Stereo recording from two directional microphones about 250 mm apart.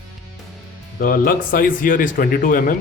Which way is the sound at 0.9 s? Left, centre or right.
Left.